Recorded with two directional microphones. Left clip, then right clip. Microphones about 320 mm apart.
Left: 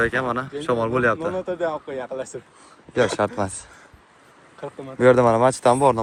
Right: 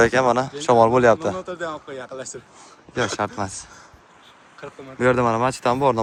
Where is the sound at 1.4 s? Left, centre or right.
Left.